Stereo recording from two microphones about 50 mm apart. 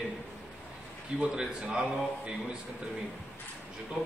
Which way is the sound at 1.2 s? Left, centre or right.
Centre.